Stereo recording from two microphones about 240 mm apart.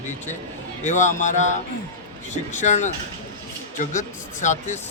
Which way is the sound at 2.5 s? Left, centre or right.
Left.